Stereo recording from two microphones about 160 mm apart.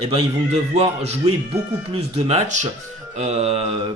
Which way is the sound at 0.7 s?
40° right (ahead or behind).